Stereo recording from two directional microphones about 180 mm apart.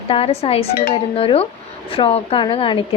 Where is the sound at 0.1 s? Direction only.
30° left (ahead or behind).